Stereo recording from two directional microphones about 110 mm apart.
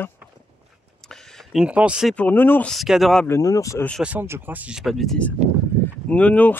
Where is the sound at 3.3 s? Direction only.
30° left (ahead or behind).